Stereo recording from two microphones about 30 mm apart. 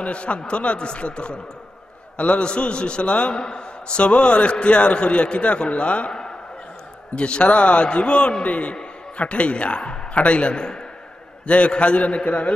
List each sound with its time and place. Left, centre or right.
0.0 s a man's voice: left
7.2 s a man's voice: left
10.5 s a man's voice: left
11.4 s a man's voice: left